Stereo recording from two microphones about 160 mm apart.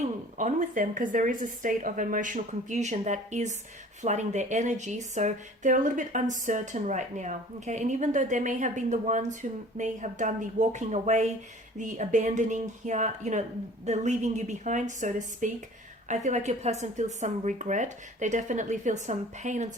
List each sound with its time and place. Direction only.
0.0 s speech: 50° right (ahead or behind)